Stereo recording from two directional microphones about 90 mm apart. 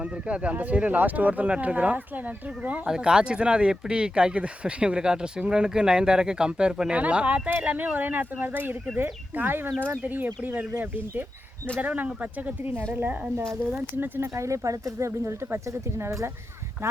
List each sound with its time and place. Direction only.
0.0 s speech: 15° right (ahead or behind)
13.3 s speech: 30° right (ahead or behind)
13.7 s speech: 20° right (ahead or behind)
14.4 s speech: 35° right (ahead or behind)